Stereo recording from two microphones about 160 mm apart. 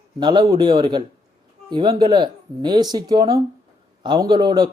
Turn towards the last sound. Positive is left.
turn(degrees=-25)  # may be behind; listen again after turning